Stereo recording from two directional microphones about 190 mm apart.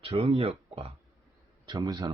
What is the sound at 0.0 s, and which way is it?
Speech, 30° right (ahead or behind).